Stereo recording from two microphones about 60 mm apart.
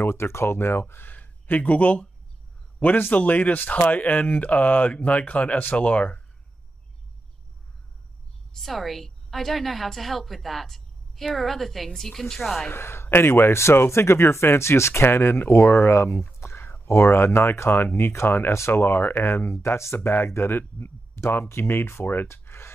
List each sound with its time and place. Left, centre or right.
0.0 s speech: left
3.2 s speech: left
8.5 s a woman's voice: centre
12.6 s speech: left
16.3 s a sound: left
16.8 s speech: left